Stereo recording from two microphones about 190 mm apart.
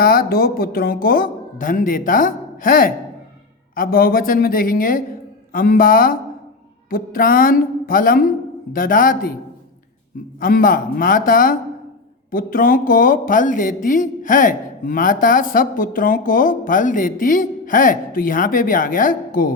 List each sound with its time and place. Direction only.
0.0 s speech: 50° left (ahead or behind)
10.4 s speech: 45° left (ahead or behind)